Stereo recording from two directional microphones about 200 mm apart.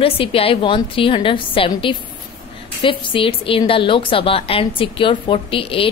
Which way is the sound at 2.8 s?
25° left (ahead or behind).